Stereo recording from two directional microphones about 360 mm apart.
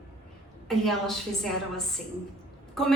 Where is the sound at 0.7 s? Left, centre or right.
Centre.